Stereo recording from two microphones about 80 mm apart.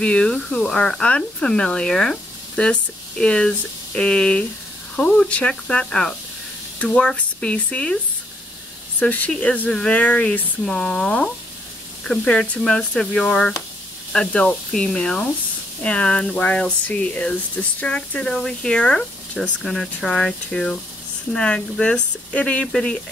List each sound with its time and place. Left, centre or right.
0.0 s speech: centre
9.0 s speech: left